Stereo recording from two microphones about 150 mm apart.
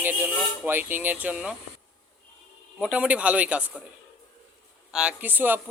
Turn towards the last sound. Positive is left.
turn(degrees=-10)  # may be behind; listen again after turning